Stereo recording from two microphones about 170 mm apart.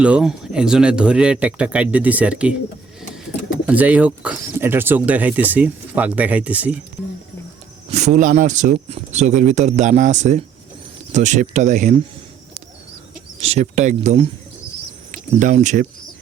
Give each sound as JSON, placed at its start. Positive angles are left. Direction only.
{"t": 0.0, "sound": "speech", "side_deg": -5}
{"t": 3.7, "sound": "speech", "side_deg": -10}
{"t": 7.9, "sound": "speech", "side_deg": -40}
{"t": 13.4, "sound": "speech", "side_deg": -40}
{"t": 15.4, "sound": "speech", "side_deg": -45}